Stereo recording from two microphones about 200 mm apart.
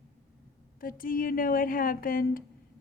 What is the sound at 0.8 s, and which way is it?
Speech, 45° left (ahead or behind).